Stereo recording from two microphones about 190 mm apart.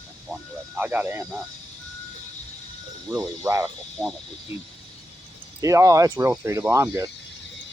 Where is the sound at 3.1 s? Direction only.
15° right (ahead or behind).